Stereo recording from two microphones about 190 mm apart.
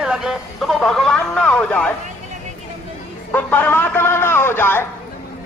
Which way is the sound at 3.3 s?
10° left (ahead or behind).